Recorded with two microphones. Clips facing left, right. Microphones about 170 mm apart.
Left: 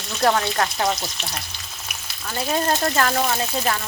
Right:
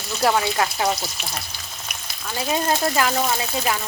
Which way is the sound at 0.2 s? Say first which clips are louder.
Even; 5° right (ahead or behind).